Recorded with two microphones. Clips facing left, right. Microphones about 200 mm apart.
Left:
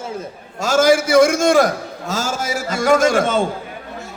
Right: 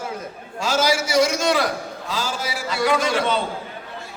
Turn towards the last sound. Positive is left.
turn(degrees=45)  # may be behind; listen again after turning